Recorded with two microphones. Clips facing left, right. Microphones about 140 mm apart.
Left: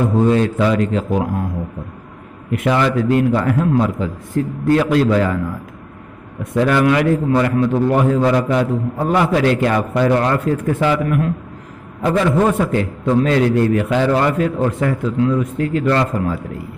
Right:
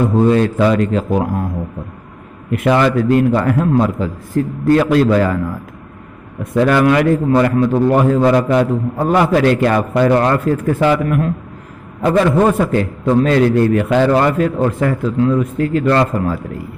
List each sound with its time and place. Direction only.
0.3 s a man's voice: 45° right (ahead or behind)
2.5 s a man's voice: 50° right (ahead or behind)
6.5 s a man's voice: 50° right (ahead or behind)
10.9 s a man's voice: 40° right (ahead or behind)